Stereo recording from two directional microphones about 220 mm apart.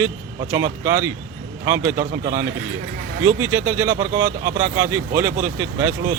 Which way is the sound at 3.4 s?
10° right (ahead or behind).